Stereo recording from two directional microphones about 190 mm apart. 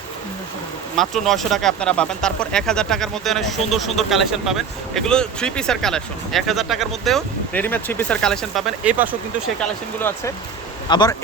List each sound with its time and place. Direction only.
0.9 s speech: centre (ahead or behind)
9.6 s speech: 10° left (ahead or behind)
10.8 s speech: 20° left (ahead or behind)